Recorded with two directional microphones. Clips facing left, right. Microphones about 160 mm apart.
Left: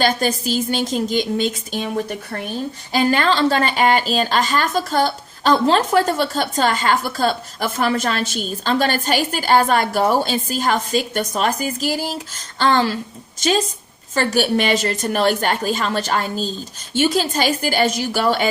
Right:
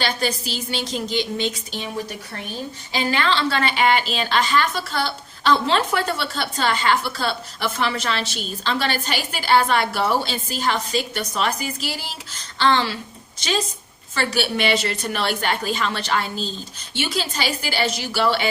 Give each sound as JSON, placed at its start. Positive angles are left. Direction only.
{"t": 0.0, "sound": "a woman's voice", "side_deg": 45}
{"t": 14.2, "sound": "a woman's voice", "side_deg": 45}